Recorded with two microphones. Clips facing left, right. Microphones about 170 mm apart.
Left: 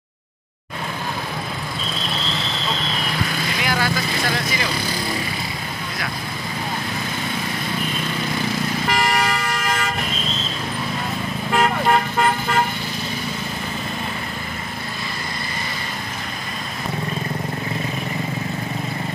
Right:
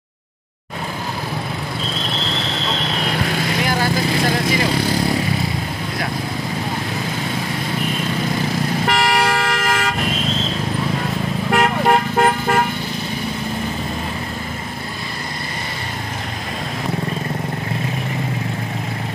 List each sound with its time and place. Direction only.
3.6 s vehicle: 40° right (ahead or behind)
8.8 s vehicle: 70° right (ahead or behind); by 9.8 s 85° right
11.5 s vehicle: 55° right (ahead or behind)